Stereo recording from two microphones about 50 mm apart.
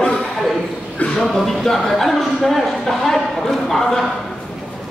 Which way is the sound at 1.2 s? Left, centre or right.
Centre.